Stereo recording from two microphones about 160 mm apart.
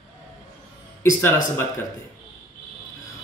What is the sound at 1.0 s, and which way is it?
Speech, 15° left (ahead or behind).